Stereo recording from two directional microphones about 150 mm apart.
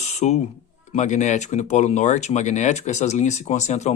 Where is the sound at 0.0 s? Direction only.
50° left (ahead or behind).